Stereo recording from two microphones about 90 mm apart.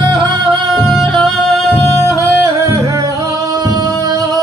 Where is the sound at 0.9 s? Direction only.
5° left (ahead or behind).